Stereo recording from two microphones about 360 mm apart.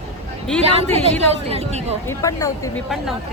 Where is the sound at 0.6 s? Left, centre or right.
Centre.